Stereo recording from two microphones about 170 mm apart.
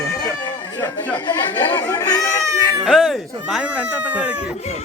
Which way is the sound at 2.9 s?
Centre (ahead or behind).